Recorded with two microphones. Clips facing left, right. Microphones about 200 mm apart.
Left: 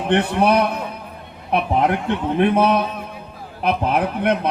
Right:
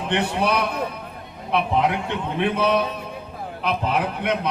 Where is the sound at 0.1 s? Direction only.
55° left (ahead or behind).